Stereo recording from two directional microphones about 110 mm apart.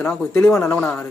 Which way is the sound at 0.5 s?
20° left (ahead or behind).